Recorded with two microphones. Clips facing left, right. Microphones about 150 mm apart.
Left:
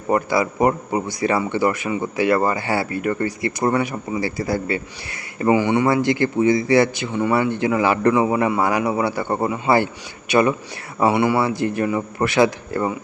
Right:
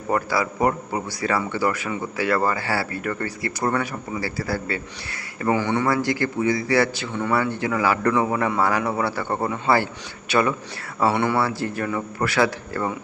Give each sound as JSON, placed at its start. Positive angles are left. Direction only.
{"t": 0.1, "sound": "a man's voice", "side_deg": 20}